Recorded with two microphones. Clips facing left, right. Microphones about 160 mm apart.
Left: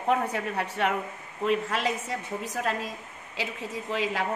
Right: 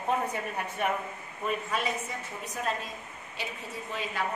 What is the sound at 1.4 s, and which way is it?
A woman's voice, 90° left.